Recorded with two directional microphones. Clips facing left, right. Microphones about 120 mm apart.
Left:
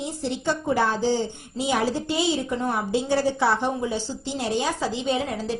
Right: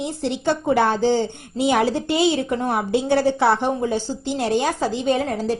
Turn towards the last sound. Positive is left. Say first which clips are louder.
# right 5 dB
turn(degrees=-50)  # may be behind; listen again after turning